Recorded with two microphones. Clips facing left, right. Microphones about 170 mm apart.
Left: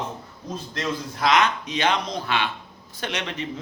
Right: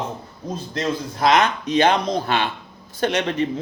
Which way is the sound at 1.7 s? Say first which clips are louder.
Right 7 dB; 55° right (ahead or behind).